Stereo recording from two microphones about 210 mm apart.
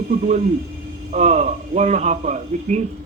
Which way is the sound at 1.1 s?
30° right (ahead or behind).